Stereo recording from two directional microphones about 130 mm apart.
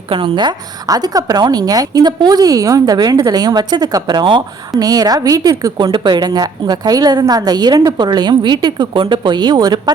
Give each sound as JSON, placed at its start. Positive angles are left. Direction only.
{"t": 0.1, "sound": "a woman's voice", "side_deg": -40}
{"t": 5.7, "sound": "a woman's voice", "side_deg": -40}